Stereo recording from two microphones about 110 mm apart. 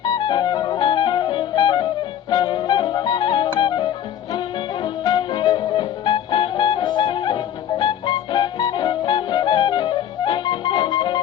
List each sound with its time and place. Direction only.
0.0 s clarinet: 40° left (ahead or behind)